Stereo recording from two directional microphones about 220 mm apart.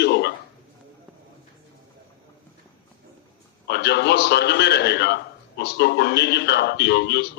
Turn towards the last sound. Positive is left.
turn(degrees=50)  # may be behind; listen again after turning